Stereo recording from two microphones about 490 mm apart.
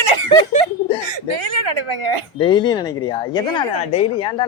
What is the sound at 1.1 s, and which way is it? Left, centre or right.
A woman's voice, right.